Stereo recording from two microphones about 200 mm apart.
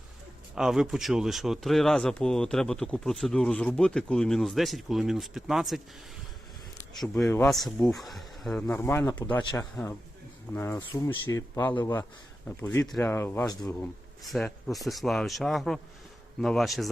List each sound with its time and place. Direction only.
0.5 s speech: 5° right (ahead or behind)
7.3 s speech: 10° left (ahead or behind)
14.3 s speech: centre (ahead or behind)